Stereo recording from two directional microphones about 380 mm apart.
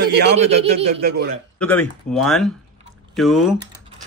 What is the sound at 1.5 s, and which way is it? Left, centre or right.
Speech, centre.